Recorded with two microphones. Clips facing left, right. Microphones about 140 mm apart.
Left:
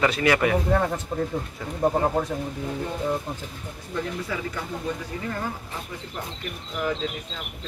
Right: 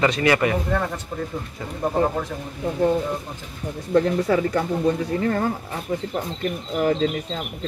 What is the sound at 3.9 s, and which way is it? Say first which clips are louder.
Speech: right 11 dB; 70° right (ahead or behind).